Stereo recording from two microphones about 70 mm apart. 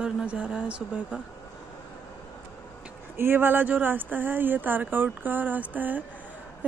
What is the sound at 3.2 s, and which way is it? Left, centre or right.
Speech, right.